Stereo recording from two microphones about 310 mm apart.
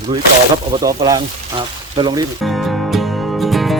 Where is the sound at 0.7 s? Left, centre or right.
Centre.